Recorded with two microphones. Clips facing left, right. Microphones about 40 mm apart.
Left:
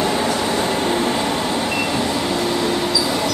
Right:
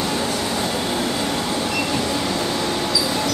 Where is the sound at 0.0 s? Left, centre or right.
Left.